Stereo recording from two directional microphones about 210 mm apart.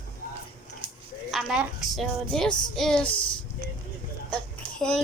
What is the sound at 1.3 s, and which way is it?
Speech, centre (ahead or behind).